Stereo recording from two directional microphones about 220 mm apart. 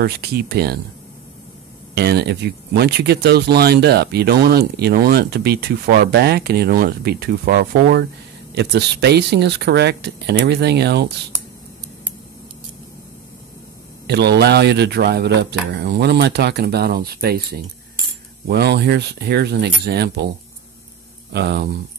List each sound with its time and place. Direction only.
0.0 s speech: 45° right (ahead or behind)
2.0 s speech: 50° right (ahead or behind)
14.0 s speech: 50° right (ahead or behind)
21.3 s speech: 45° right (ahead or behind)